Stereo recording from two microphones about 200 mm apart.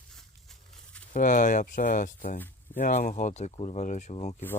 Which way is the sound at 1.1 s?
40° left (ahead or behind).